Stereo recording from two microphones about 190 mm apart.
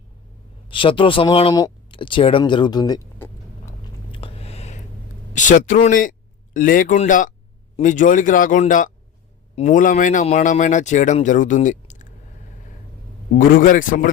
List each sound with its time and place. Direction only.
0.7 s speech: 25° left (ahead or behind)
4.1 s a sound: 30° left (ahead or behind)
5.3 s speech: 40° left (ahead or behind)
13.3 s speech: 45° left (ahead or behind)